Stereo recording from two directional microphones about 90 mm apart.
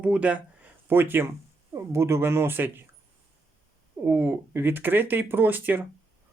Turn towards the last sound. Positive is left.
turn(degrees=-20)  # may be behind; listen again after turning